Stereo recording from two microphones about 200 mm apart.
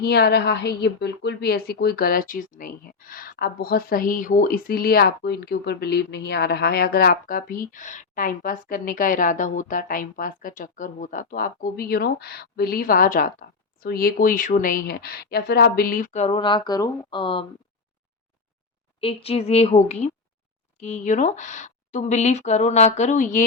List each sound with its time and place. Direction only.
0.0 s a woman's voice: 55° left (ahead or behind); by 17.4 s 25° left (ahead or behind)
18.9 s speech: 30° left (ahead or behind)